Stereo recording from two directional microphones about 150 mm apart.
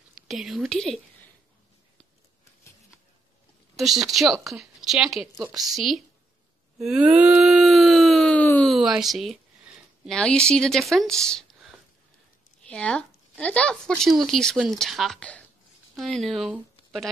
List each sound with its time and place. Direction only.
0.3 s speech: centre (ahead or behind)
3.7 s a woman's voice: centre (ahead or behind)
6.8 s a sound: 5° right (ahead or behind)
8.7 s speech: centre (ahead or behind)